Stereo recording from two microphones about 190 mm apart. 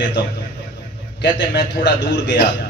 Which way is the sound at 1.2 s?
65° left (ahead or behind).